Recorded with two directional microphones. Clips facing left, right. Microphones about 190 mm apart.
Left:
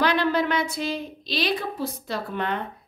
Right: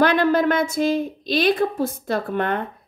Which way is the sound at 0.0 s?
50° right (ahead or behind).